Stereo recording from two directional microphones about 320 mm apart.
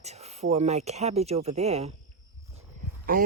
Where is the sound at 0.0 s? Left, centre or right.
Centre.